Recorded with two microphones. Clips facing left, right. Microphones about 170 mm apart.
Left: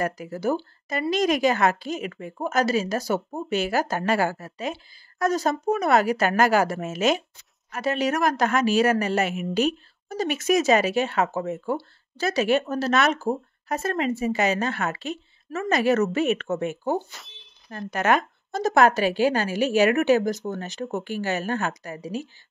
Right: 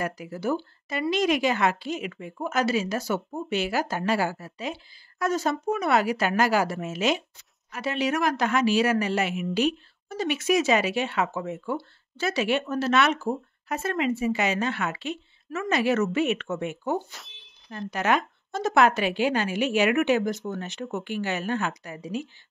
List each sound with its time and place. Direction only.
0.0 s a woman's voice: 45° left (ahead or behind)
17.6 s speech: 45° left (ahead or behind)